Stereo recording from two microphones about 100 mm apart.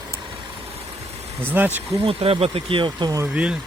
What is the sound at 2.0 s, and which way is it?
Speech, 70° right (ahead or behind).